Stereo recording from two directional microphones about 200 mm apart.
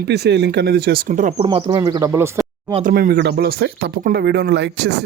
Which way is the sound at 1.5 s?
25° right (ahead or behind).